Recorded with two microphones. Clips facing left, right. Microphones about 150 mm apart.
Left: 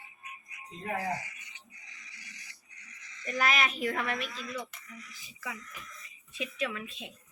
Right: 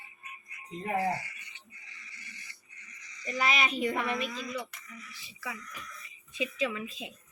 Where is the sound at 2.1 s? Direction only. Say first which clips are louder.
Right 2 dB; 90° left.